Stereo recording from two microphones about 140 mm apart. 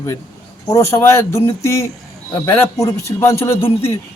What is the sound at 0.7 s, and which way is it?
A man's voice, 20° left (ahead or behind).